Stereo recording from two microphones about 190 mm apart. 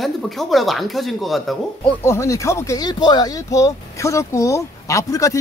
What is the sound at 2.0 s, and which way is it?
Speech, 15° left (ahead or behind).